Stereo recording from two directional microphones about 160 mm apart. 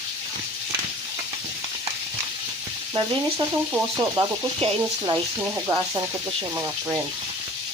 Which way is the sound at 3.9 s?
25° right (ahead or behind).